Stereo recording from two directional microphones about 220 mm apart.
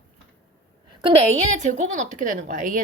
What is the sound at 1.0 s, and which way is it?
A woman's voice, 30° right (ahead or behind).